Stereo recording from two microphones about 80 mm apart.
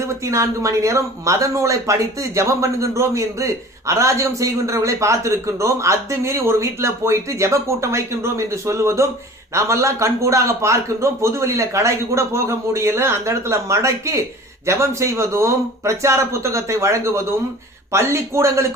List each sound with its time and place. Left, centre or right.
0.0 s speech: right